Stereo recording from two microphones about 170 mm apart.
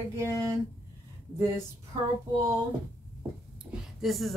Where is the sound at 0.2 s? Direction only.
15° right (ahead or behind).